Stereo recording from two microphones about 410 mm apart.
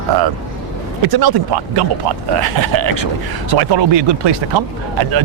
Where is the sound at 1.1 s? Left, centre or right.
Right.